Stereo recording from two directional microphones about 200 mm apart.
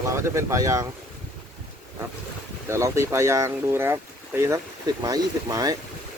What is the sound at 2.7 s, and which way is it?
Speech, 15° right (ahead or behind).